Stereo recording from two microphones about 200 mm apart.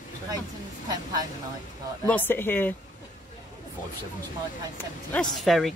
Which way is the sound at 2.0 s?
10° left (ahead or behind).